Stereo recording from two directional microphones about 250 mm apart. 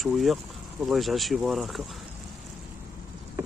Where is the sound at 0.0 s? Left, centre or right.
Centre.